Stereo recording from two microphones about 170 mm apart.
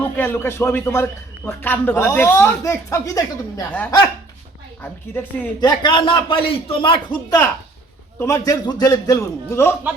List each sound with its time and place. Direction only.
0.2 s a man's voice: 10° left (ahead or behind)
3.7 s a man's voice: 10° left (ahead or behind)
5.5 s a man's voice: 25° left (ahead or behind)